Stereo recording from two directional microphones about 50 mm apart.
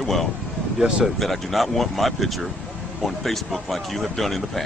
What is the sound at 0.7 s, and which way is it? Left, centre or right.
Speech, centre.